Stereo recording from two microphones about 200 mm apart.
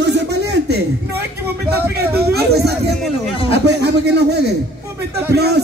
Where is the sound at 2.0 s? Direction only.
50° right (ahead or behind).